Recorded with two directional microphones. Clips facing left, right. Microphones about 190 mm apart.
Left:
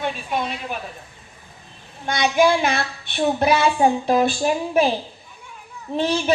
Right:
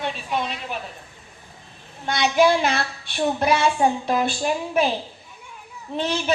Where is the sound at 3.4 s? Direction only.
30° left (ahead or behind).